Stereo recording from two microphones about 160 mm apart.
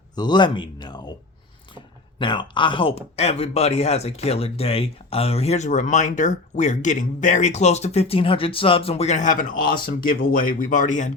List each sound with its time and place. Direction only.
0.2 s speech: 30° left (ahead or behind); by 11.1 s 50° left (ahead or behind)